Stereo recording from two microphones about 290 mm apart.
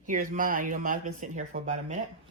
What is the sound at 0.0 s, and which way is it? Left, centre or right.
Speech, right.